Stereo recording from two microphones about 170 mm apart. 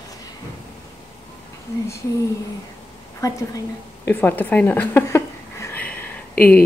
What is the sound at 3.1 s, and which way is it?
A woman's voice, 20° left (ahead or behind).